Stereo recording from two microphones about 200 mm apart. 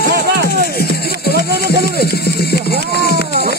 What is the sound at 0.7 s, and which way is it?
Music, 50° left (ahead or behind).